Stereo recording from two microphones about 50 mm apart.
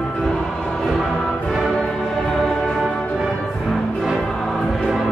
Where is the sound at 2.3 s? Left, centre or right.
Centre.